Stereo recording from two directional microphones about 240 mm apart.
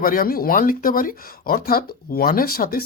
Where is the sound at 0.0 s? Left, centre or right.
Left.